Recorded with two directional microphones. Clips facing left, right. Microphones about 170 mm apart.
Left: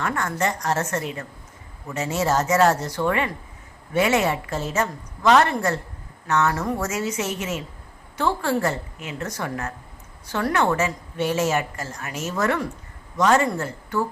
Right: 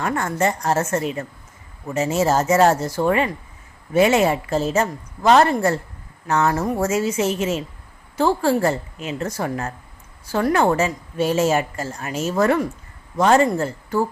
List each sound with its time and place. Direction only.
0.0 s a woman's voice: 25° right (ahead or behind)